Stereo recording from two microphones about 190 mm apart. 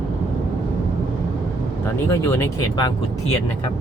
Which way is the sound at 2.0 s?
15° left (ahead or behind).